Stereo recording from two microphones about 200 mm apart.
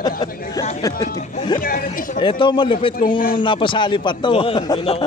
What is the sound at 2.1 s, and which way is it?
A man's voice, 25° left (ahead or behind).